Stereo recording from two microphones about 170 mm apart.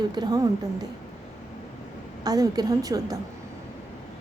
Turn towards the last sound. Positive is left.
turn(degrees=-20)  # may be behind; listen again after turning